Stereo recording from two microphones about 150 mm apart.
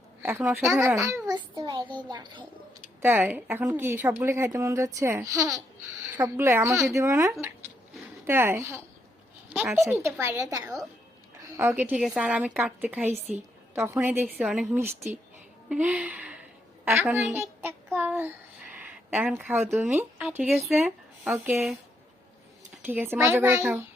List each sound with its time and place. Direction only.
0.2 s a sound: 15° right (ahead or behind)
0.6 s a woman's voice: 20° right (ahead or behind)
3.0 s a woman's voice: 15° right (ahead or behind)
9.5 s speech: centre (ahead or behind)
10.1 s a woman's voice: 20° right (ahead or behind)
11.9 s a woman's voice: centre (ahead or behind)
17.3 s child singing: 15° right (ahead or behind)
18.8 s a sound: 10° right (ahead or behind)
19.5 s a woman's voice: 15° right (ahead or behind)
20.5 s a woman's voice: centre (ahead or behind)
20.8 s speech: 10° right (ahead or behind)
22.9 s a woman's voice: 15° right (ahead or behind)